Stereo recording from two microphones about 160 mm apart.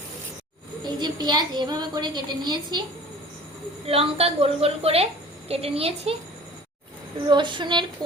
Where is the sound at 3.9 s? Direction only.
40° right (ahead or behind).